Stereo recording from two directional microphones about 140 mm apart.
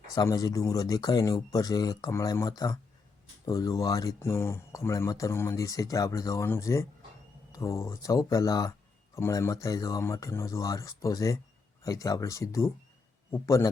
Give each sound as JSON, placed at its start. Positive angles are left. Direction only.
{"t": 0.2, "sound": "speech", "side_deg": 25}